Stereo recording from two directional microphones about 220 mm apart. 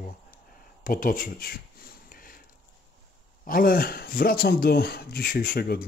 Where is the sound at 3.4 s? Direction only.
40° left (ahead or behind).